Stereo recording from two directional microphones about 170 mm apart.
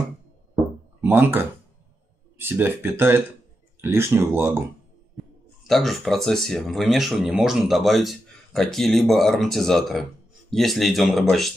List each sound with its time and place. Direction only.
1.0 s speech: 10° right (ahead or behind)
5.6 s speech: centre (ahead or behind)